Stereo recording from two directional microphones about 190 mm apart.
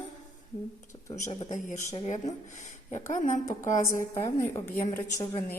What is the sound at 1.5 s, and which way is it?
Speech, 40° left (ahead or behind).